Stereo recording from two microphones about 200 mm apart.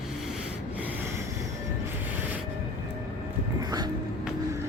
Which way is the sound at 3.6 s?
20° right (ahead or behind).